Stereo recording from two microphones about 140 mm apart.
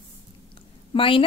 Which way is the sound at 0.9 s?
40° left (ahead or behind).